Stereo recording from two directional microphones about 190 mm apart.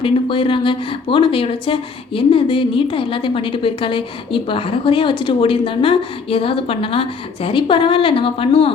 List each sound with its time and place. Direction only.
0.0 s speech: 30° left (ahead or behind)